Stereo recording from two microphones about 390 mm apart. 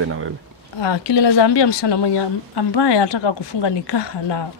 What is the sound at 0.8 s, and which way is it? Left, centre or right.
A woman's voice, left.